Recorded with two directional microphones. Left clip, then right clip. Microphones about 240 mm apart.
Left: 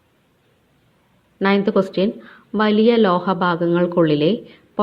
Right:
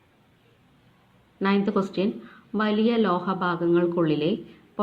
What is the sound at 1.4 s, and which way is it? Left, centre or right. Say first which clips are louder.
Speech: left 7 dB; left.